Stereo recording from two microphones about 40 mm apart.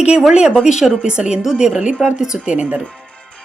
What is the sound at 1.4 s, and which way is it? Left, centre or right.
Speech, centre.